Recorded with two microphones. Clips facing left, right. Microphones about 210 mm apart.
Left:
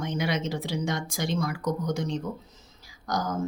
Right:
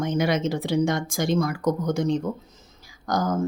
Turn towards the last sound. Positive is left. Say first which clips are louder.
# right 5 dB
turn(degrees=-50)  # may be behind; listen again after turning